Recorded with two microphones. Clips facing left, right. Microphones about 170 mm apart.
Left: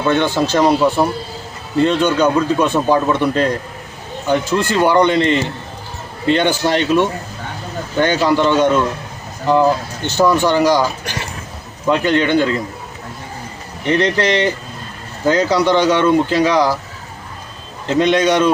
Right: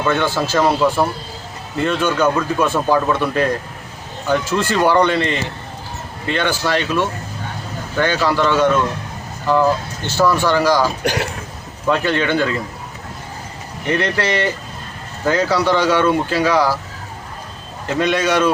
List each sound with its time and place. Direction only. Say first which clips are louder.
0.0 s speech: left 3 dB; 20° left (ahead or behind)
11.0 s speech: right 7 dB; 70° right (ahead or behind)
11.9 s speech: left 3 dB; 15° left (ahead or behind)
13.8 s speech: left 4 dB; 20° left (ahead or behind)
17.8 s speech: left 4 dB; 20° left (ahead or behind)